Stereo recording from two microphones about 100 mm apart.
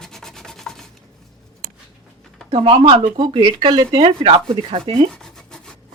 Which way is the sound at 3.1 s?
55° right (ahead or behind).